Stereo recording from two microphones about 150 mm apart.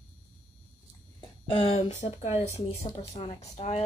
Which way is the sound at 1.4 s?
35° left (ahead or behind).